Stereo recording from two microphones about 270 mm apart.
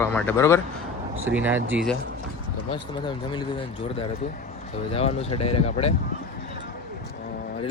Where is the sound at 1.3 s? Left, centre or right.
Centre.